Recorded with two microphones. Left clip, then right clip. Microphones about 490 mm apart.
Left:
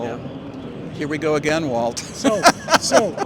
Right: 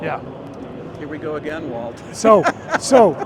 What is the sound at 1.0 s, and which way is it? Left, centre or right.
Speech, left.